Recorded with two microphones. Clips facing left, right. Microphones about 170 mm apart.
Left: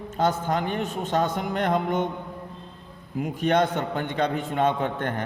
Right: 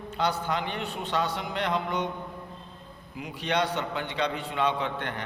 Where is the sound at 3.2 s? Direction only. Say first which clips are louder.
Left 6 dB; 50° left (ahead or behind).